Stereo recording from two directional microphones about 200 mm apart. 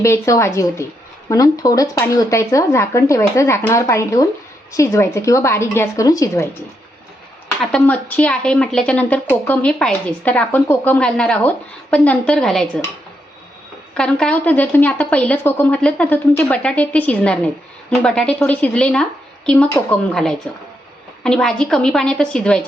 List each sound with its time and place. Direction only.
0.0 s a woman's voice: 15° left (ahead or behind)
13.9 s a woman's voice: 5° left (ahead or behind)